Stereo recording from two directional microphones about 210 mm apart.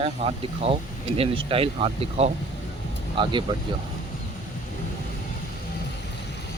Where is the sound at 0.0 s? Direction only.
30° right (ahead or behind).